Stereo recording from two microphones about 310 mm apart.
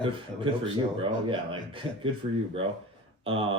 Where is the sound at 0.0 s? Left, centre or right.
Centre.